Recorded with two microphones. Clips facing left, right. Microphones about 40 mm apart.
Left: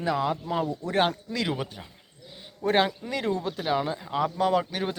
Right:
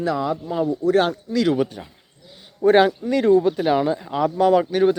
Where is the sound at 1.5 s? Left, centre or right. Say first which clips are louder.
Right 11 dB; centre.